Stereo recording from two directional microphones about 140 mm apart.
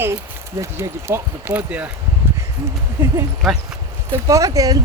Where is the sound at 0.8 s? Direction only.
15° right (ahead or behind).